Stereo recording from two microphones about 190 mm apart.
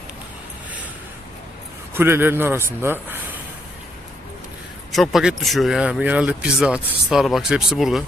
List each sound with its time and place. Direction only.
1.9 s a man's voice: 10° right (ahead or behind)
4.9 s speech: centre (ahead or behind)